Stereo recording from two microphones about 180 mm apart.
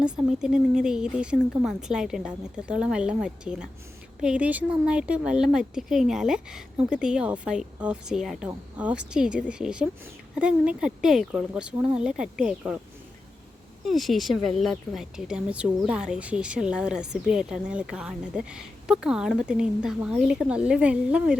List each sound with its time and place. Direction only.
0.0 s speech: 5° right (ahead or behind)
13.8 s speech: centre (ahead or behind)